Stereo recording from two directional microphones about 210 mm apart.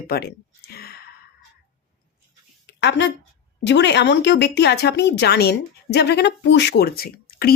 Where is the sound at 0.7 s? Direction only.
50° left (ahead or behind).